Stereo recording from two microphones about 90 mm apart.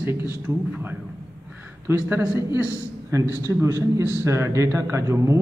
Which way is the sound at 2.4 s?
45° left (ahead or behind).